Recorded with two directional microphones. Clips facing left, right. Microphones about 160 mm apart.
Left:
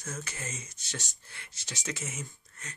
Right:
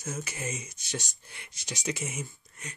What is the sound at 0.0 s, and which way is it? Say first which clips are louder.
Speech: right 4 dB; 10° right (ahead or behind).